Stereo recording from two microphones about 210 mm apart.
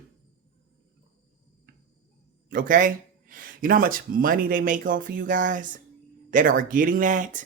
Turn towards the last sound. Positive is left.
turn(degrees=-40)  # may be behind; listen again after turning